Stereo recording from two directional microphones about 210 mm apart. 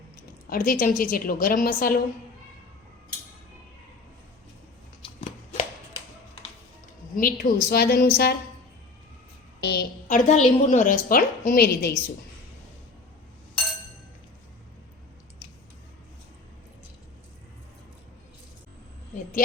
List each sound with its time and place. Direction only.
0.5 s a woman's voice: 45° left (ahead or behind)
5.0 s a sound: 25° left (ahead or behind)
7.2 s a woman's voice: 40° left (ahead or behind)
9.6 s a woman's voice: 50° left (ahead or behind)
10.1 s a woman's voice: 35° left (ahead or behind)